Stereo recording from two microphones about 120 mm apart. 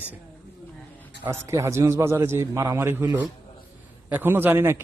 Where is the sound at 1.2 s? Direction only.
25° right (ahead or behind).